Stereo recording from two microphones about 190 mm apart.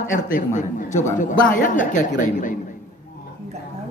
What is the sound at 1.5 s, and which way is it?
Music, 45° left (ahead or behind).